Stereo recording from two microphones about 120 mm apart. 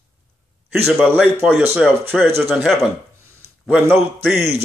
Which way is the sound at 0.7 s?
15° right (ahead or behind).